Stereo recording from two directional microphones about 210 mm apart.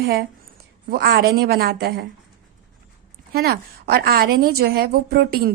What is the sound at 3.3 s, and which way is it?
A woman's voice, 45° right (ahead or behind).